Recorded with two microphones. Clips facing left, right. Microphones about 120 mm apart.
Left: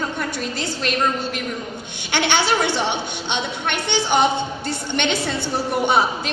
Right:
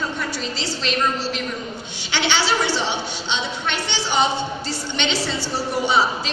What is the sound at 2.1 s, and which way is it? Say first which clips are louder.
A woman's voice: left 2 dB; 55° left (ahead or behind).